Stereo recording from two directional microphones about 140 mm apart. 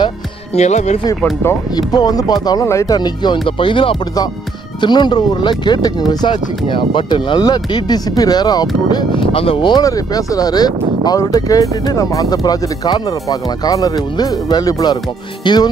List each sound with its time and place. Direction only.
0.6 s speech: 55° left (ahead or behind)
1.8 s speech: 30° left (ahead or behind)
15.4 s music: 30° left (ahead or behind)